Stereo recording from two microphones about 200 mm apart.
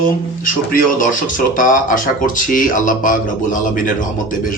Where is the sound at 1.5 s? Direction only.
45° left (ahead or behind).